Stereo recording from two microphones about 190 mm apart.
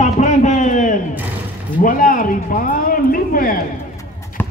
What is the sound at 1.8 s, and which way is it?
Speech, 45° left (ahead or behind).